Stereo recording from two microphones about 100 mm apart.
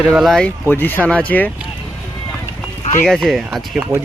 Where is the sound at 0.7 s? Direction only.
20° left (ahead or behind).